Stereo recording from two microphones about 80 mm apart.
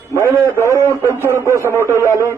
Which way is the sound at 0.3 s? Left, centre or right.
Right.